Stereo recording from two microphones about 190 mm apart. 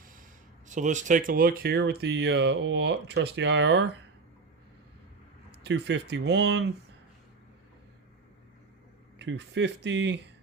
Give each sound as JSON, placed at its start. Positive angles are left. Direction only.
{"t": 0.0, "sound": "a sound", "side_deg": -45}
{"t": 0.7, "sound": "speech", "side_deg": -40}
{"t": 5.5, "sound": "speech", "side_deg": -65}
{"t": 9.1, "sound": "speech", "side_deg": -65}